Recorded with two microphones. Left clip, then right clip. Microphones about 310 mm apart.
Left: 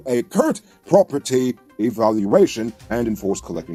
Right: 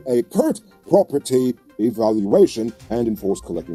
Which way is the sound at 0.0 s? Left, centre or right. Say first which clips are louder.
Even; left.